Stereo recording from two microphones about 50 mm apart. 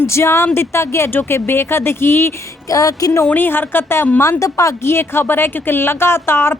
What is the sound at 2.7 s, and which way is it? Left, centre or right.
Speech, left.